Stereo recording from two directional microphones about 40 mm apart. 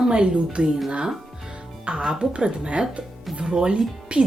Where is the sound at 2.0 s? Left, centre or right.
Centre.